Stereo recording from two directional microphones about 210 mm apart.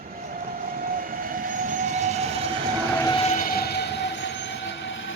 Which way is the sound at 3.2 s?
40° left (ahead or behind).